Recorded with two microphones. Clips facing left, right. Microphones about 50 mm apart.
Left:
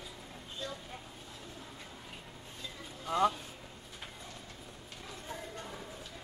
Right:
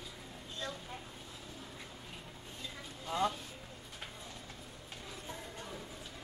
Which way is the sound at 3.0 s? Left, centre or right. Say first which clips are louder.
Left 5 dB; left.